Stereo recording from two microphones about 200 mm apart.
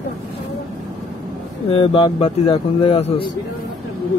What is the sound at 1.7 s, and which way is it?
Speech, 25° left (ahead or behind).